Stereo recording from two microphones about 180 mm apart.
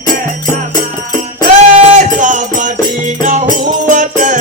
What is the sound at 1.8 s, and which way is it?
Music, 45° right (ahead or behind).